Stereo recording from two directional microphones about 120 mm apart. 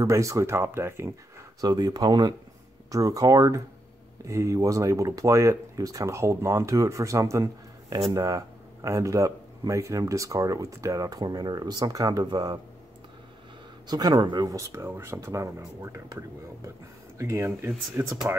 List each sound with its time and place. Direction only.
0.0 s speech: 25° right (ahead or behind)
1.6 s speech: 30° right (ahead or behind)
13.8 s speech: 35° right (ahead or behind)